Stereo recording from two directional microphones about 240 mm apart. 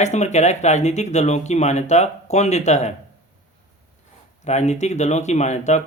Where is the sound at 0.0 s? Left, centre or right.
Left.